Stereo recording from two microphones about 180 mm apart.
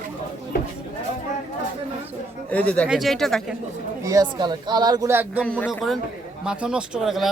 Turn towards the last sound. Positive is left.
turn(degrees=0)  # may be behind; listen again after turning